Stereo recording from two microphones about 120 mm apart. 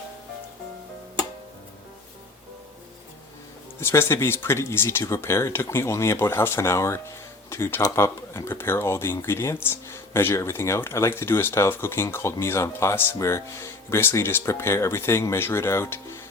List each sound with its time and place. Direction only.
3.8 s speech: 20° left (ahead or behind)